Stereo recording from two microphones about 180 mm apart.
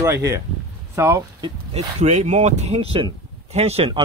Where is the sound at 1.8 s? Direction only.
35° right (ahead or behind).